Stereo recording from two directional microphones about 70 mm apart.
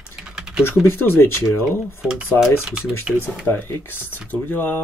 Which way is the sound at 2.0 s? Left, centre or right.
Centre.